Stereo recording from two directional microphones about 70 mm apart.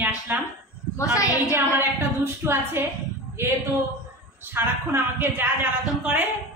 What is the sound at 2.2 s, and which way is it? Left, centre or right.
Speech, right.